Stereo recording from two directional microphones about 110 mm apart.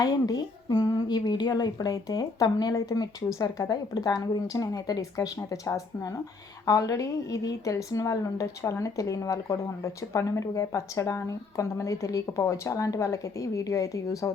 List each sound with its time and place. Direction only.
0.0 s a woman's voice: 35° left (ahead or behind)